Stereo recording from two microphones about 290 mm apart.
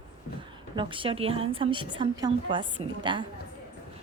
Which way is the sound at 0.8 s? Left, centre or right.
Centre.